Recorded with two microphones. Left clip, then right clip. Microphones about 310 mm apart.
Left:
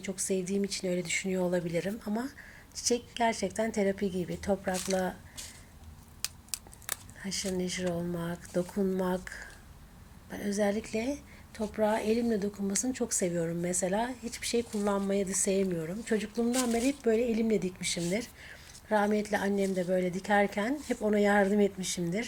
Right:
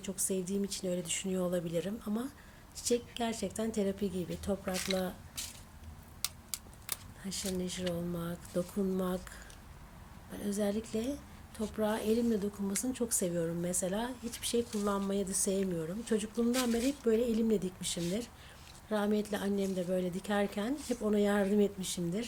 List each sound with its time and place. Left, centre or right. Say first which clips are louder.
0.0 s a woman's voice: left 4 dB; centre
6.5 s a sound: left 4 dB; left
7.3 s a woman's voice: left 4 dB; centre
10.3 s a woman's voice: left 5 dB; centre